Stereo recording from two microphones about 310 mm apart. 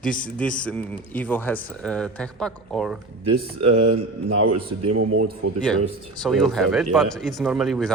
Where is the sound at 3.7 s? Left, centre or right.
Right.